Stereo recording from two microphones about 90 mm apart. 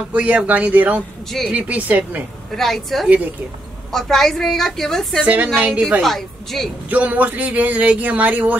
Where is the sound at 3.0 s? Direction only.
15° right (ahead or behind).